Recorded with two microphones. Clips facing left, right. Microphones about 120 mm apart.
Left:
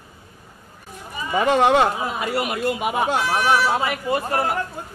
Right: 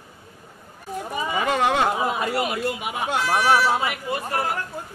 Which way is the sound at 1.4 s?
30° left (ahead or behind).